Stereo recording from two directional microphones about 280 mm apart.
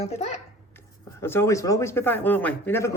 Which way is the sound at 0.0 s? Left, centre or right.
Left.